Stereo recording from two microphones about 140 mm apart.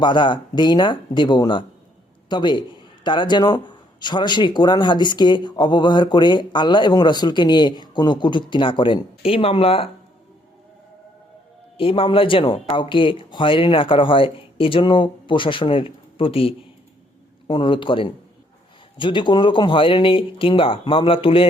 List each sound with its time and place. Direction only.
0.0 s a man's voice: 35° left (ahead or behind)
11.8 s a man's voice: 40° left (ahead or behind)